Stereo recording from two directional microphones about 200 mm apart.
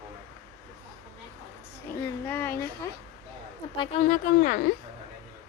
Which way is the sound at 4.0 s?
40° left (ahead or behind).